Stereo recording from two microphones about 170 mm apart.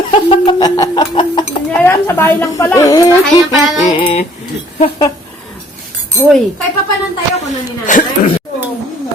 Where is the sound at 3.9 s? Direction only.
30° left (ahead or behind).